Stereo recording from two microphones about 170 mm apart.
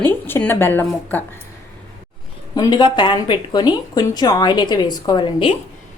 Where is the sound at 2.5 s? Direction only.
25° left (ahead or behind).